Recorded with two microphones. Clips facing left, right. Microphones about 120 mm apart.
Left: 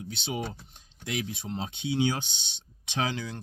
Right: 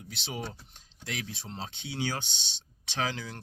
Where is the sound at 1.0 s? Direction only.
15° left (ahead or behind).